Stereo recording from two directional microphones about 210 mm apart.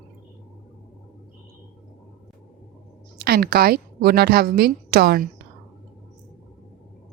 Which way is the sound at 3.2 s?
45° right (ahead or behind).